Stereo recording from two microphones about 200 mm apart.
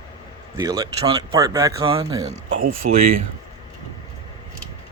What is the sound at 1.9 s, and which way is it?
Speech, 30° right (ahead or behind).